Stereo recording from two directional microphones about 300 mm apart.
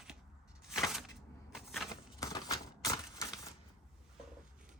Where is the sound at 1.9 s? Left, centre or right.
Centre.